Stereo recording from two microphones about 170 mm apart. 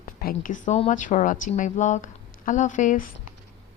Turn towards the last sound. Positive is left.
turn(degrees=50)  # may be behind; listen again after turning